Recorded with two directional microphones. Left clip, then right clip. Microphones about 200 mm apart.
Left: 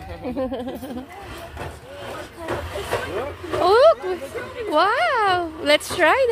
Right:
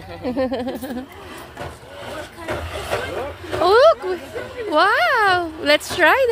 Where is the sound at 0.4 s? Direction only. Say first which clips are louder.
Right 4 dB; 15° right (ahead or behind).